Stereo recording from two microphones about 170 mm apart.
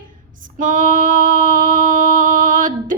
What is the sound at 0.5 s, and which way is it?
Female singing, 50° right (ahead or behind).